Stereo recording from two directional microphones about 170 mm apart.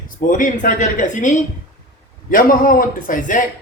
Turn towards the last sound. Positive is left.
turn(degrees=50)  # may be behind; listen again after turning